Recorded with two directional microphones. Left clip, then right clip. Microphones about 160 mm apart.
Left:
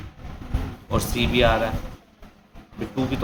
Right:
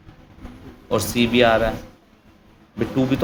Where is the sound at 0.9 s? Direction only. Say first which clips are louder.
Right 4 dB; 35° right (ahead or behind).